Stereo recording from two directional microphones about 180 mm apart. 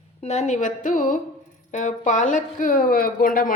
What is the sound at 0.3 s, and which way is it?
A woman's voice, 40° left (ahead or behind).